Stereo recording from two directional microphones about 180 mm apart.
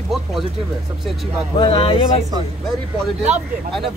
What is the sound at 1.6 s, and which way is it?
Speech, 30° left (ahead or behind).